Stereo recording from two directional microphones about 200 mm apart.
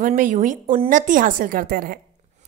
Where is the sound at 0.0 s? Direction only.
40° right (ahead or behind).